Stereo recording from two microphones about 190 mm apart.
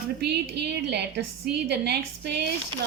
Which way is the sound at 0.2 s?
60° right (ahead or behind).